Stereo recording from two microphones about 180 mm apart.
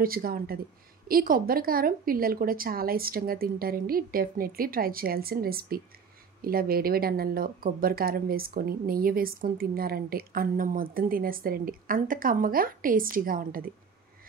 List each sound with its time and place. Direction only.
0.0 s speech: 55° right (ahead or behind)